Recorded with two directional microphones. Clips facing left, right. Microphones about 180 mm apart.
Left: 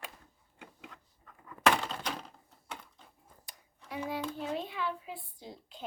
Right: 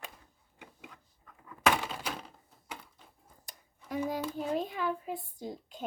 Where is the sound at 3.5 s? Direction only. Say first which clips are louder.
Right 6 dB; 45° right (ahead or behind).